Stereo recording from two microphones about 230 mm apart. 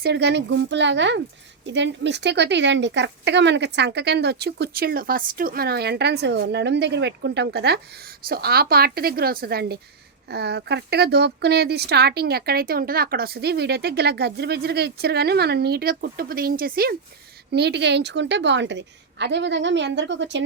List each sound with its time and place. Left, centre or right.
0.0 s a woman's voice: right